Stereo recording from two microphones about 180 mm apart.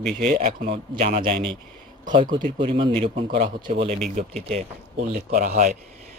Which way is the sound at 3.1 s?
45° right (ahead or behind).